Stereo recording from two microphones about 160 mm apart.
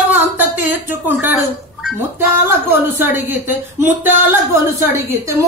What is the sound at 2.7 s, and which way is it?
Speech, 15° right (ahead or behind).